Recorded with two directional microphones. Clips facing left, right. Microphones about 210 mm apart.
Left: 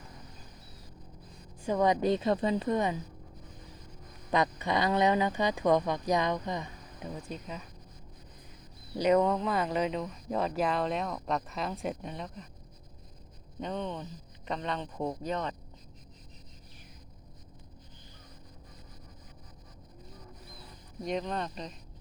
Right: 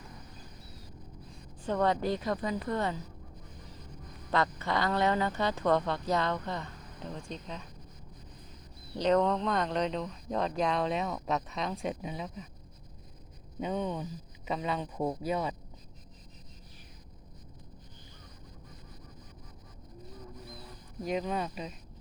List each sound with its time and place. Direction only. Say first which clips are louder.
1.6 s a woman's voice: left 2 dB; 10° left (ahead or behind)
4.3 s speech: left 2 dB; 15° left (ahead or behind)
9.0 s speech: left 1 dB; 10° left (ahead or behind)
13.6 s speech: right 2 dB; 5° right (ahead or behind)
21.0 s speech: right 1 dB; 5° right (ahead or behind)